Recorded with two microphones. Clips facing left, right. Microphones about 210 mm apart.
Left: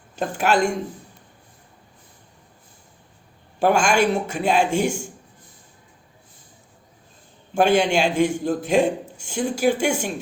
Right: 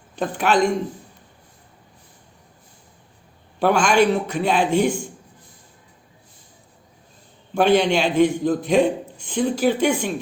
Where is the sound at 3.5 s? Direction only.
45° left (ahead or behind).